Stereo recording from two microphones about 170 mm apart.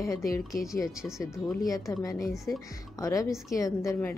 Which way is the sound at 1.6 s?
20° left (ahead or behind).